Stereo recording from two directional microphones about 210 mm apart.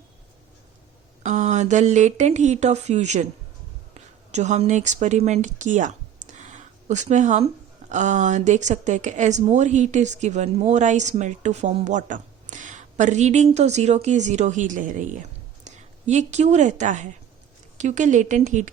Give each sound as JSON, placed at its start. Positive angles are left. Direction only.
{"t": 1.2, "sound": "a woman's voice", "side_deg": -35}